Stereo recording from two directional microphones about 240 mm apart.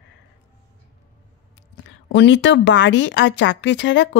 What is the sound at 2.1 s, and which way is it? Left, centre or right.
Speech, left.